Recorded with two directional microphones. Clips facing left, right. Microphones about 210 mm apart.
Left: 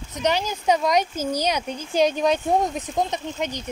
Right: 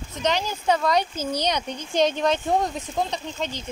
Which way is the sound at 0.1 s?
15° left (ahead or behind).